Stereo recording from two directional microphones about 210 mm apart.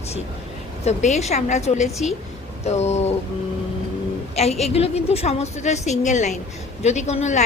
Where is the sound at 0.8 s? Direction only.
30° left (ahead or behind).